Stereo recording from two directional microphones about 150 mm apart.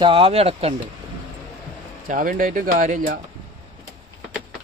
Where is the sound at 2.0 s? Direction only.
65° right (ahead or behind).